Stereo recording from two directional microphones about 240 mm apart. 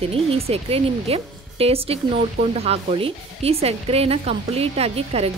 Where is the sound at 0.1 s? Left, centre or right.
Right.